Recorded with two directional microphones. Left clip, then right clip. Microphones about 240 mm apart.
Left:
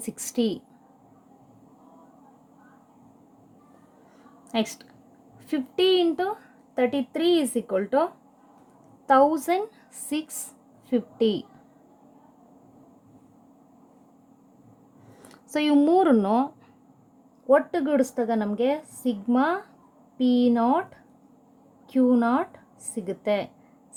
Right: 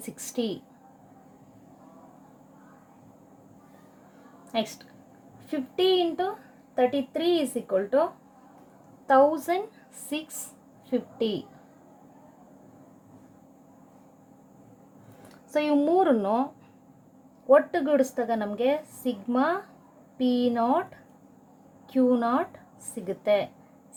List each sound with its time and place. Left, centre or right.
0.0 s a woman's voice: left
4.5 s a woman's voice: left
15.3 s a woman's voice: left
17.5 s a woman's voice: left
21.8 s a woman's voice: left